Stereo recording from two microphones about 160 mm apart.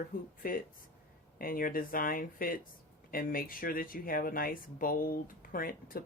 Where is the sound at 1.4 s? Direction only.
60° left (ahead or behind).